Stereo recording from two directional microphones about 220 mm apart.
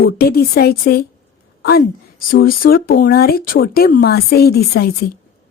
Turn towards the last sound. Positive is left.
turn(degrees=45)  # may be behind; listen again after turning